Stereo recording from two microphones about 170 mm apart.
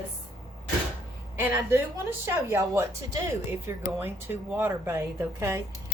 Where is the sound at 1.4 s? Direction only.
15° right (ahead or behind).